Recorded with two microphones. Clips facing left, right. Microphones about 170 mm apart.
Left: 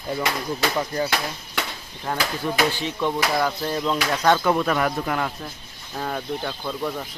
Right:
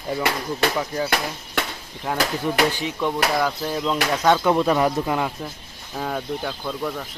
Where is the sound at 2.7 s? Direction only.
10° right (ahead or behind).